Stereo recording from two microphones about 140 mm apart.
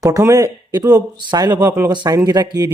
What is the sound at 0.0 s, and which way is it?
Speech, 25° right (ahead or behind).